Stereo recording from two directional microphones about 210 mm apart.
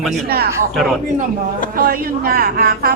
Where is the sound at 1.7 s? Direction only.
45° right (ahead or behind).